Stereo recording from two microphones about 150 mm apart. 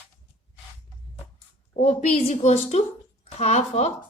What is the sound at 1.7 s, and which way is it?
A woman's voice, 45° left (ahead or behind).